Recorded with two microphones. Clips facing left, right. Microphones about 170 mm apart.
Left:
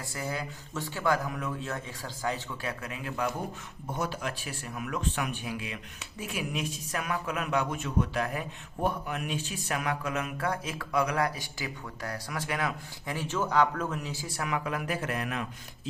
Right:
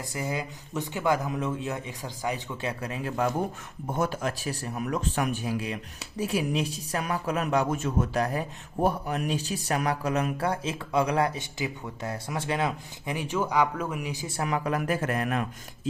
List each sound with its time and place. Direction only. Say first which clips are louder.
0.1 s speech: right 3 dB; 15° right (ahead or behind)
2.9 s speech: right 6 dB; 40° right (ahead or behind)
3.9 s speech: right 5 dB; 50° right (ahead or behind)